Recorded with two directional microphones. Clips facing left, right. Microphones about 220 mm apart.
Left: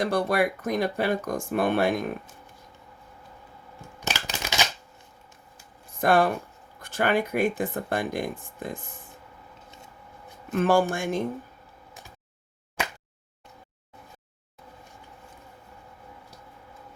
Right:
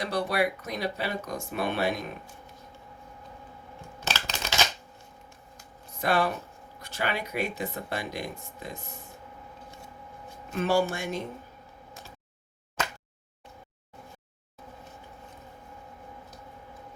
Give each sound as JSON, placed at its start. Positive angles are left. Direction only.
{"t": 0.0, "sound": "speech", "side_deg": 50}
{"t": 4.0, "sound": "scissors", "side_deg": 15}
{"t": 6.0, "sound": "speech", "side_deg": 50}
{"t": 10.5, "sound": "speech", "side_deg": 50}